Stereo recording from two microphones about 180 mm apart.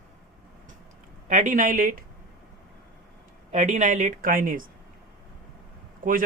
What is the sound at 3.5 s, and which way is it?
A man's voice, 40° right (ahead or behind).